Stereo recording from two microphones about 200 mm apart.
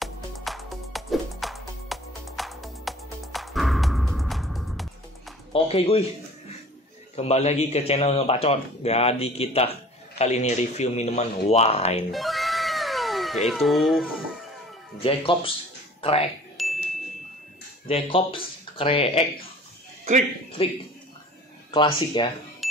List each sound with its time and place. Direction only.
0.0 s music: centre (ahead or behind)
5.5 s speech: 30° left (ahead or behind)
7.2 s a man's voice: 30° left (ahead or behind)
12.1 s cat: centre (ahead or behind)
15.0 s speech: 25° left (ahead or behind)
16.5 s chime: centre (ahead or behind)
17.8 s speech: 25° left (ahead or behind)
20.6 s speech: 25° left (ahead or behind)
22.6 s cash register: centre (ahead or behind)